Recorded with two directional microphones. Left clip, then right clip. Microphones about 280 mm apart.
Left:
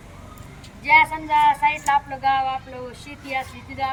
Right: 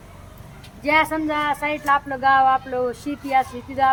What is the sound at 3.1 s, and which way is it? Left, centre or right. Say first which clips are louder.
Speech: right 5 dB; centre.